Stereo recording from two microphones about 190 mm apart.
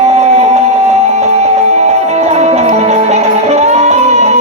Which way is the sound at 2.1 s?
35° right (ahead or behind).